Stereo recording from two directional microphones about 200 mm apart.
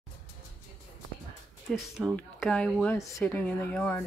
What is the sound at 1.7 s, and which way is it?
Speech, centre (ahead or behind).